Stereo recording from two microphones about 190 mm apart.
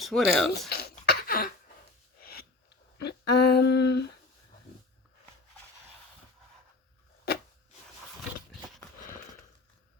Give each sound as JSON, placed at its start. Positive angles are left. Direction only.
{"t": 0.0, "sound": "speech", "side_deg": 0}
{"t": 0.7, "sound": "cough", "side_deg": 55}
{"t": 2.2, "sound": "a sound", "side_deg": 55}